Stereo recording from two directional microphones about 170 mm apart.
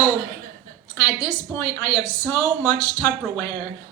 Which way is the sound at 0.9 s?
20° left (ahead or behind).